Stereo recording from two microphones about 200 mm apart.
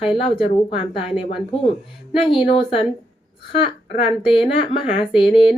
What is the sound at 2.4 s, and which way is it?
Speech, 25° left (ahead or behind).